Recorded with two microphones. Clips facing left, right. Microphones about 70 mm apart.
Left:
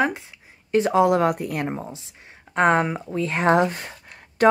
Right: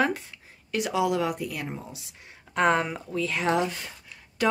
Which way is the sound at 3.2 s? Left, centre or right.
Left.